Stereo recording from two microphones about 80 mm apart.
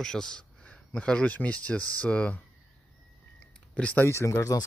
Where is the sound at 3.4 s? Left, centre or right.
Centre.